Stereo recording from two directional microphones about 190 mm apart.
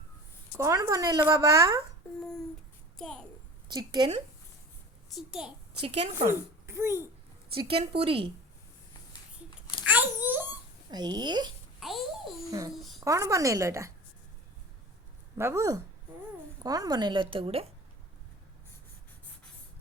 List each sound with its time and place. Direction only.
0.5 s speech: 15° right (ahead or behind)
3.0 s a child's voice: 5° left (ahead or behind)
3.7 s a woman's voice: 25° right (ahead or behind)
5.1 s a child's voice: centre (ahead or behind)
5.8 s a woman's voice: 35° right (ahead or behind)
6.7 s speech: 15° right (ahead or behind)
7.5 s a woman's voice: 30° right (ahead or behind)
9.8 s a sound: 10° right (ahead or behind)
10.9 s a woman's voice: 20° right (ahead or behind)
11.8 s a child's voice: centre (ahead or behind)
12.5 s a child's voice: 20° right (ahead or behind)
15.4 s a woman's voice: 15° right (ahead or behind); by 17.7 s 30° right (ahead or behind)